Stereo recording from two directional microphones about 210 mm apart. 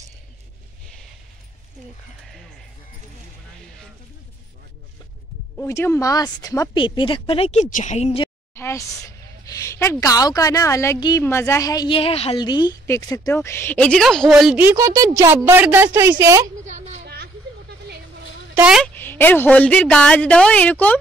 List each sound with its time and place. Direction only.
5.6 s a woman's voice: 10° left (ahead or behind); by 8.3 s 30° left (ahead or behind)
8.5 s a woman's voice: 15° left (ahead or behind); by 16.4 s 15° right (ahead or behind)
17.0 s a sound: 50° right (ahead or behind)
18.5 s a woman's voice: 5° right (ahead or behind)
18.9 s speech: 10° left (ahead or behind)